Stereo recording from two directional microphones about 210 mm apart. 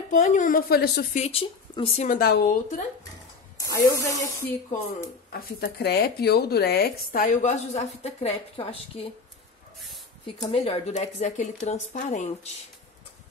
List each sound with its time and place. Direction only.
0.1 s speech: 35° left (ahead or behind)
1.1 s speech: 30° left (ahead or behind)
2.1 s speech: 45° left (ahead or behind)
3.5 s spray: 15° left (ahead or behind)
4.0 s speech: 15° left (ahead or behind)
5.3 s speech: 50° left (ahead or behind); by 9.0 s 30° left (ahead or behind)
10.2 s speech: 25° left (ahead or behind)